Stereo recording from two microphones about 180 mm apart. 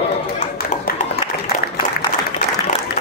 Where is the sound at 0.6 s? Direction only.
55° left (ahead or behind).